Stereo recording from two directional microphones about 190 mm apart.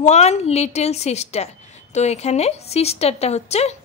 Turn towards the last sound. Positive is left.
turn(degrees=35)  # may be behind; listen again after turning